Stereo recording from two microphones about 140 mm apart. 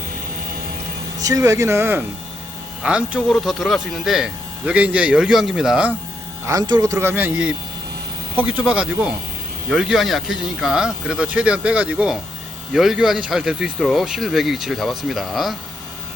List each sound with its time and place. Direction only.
1.2 s speech: 25° right (ahead or behind); by 5.9 s 5° right (ahead or behind)
6.4 s speech: 25° right (ahead or behind); by 15.5 s centre (ahead or behind)